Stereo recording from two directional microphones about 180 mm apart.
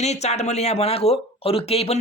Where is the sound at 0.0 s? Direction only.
40° left (ahead or behind).